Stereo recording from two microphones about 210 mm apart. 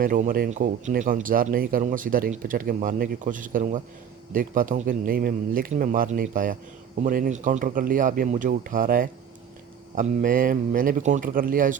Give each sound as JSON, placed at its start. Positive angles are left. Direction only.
{"t": 0.0, "sound": "speech", "side_deg": -40}